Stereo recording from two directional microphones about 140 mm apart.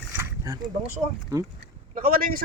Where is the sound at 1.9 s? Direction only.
90° right.